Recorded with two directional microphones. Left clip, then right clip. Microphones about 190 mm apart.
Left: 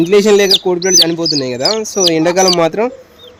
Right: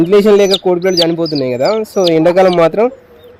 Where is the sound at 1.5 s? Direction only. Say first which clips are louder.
Right 2 dB; 25° right (ahead or behind).